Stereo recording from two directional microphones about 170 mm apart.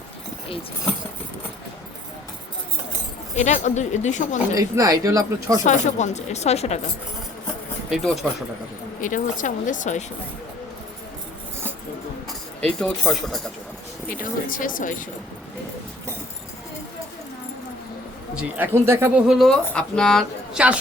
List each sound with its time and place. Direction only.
3.3 s speech: 45° left (ahead or behind)
4.5 s speech: 20° right (ahead or behind)
5.6 s speech: 45° left (ahead or behind)
7.9 s a woman's voice: centre (ahead or behind)
9.0 s speech: 50° left (ahead or behind)
12.6 s a woman's voice: 5° left (ahead or behind)
14.1 s speech: 55° left (ahead or behind)
18.3 s speech: 10° right (ahead or behind)
19.3 s a woman's voice: centre (ahead or behind)